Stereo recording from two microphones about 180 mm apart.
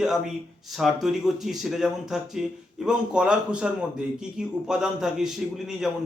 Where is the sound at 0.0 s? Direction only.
Centre (ahead or behind).